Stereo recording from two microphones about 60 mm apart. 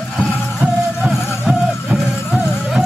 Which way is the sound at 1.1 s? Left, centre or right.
Centre.